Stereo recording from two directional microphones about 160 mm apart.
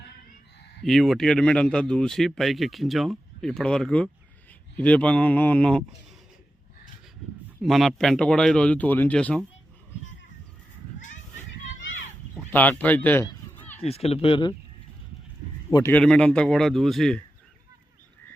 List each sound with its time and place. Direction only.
0.8 s a man's voice: centre (ahead or behind)
7.6 s a man's voice: centre (ahead or behind)
12.4 s speech: 10° left (ahead or behind)
13.6 s a sound: 10° left (ahead or behind)
13.8 s speech: 40° left (ahead or behind)
15.9 s a man's voice: 5° left (ahead or behind)